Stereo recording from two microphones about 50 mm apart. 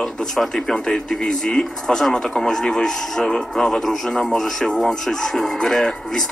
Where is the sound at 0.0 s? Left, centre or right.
Centre.